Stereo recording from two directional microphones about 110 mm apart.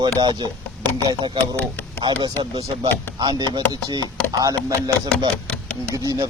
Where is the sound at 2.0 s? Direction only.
45° right (ahead or behind).